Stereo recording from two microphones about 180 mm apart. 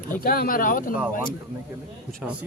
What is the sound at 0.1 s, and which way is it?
Speech, 55° left (ahead or behind).